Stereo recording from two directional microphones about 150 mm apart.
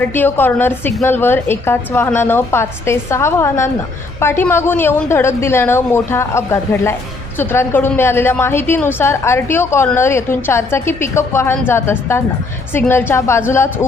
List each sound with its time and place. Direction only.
0.1 s a woman's voice: 15° left (ahead or behind)